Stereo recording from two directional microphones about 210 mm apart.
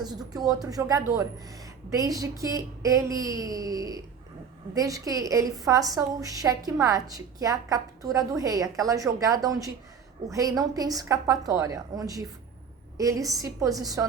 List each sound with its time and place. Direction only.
0.0 s a woman's voice: 20° right (ahead or behind)